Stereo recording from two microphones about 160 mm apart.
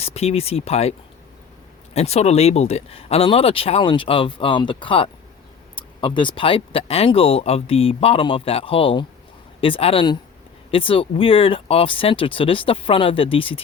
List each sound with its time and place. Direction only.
0.0 s speech: 40° left (ahead or behind)